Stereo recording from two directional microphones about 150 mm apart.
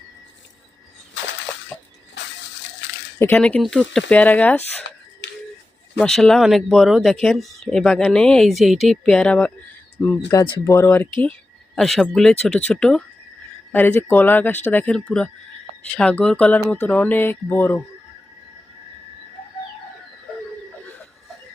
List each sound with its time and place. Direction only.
1.7 s a sound: 15° left (ahead or behind)
3.2 s speech: 15° left (ahead or behind)
6.0 s speech: 5° left (ahead or behind)
10.2 s speech: 25° left (ahead or behind)
11.7 s speech: centre (ahead or behind)